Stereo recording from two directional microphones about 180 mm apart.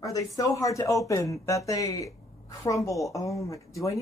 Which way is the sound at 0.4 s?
15° left (ahead or behind).